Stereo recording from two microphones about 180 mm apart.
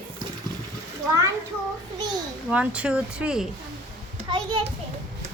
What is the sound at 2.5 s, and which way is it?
Speech, 5° right (ahead or behind).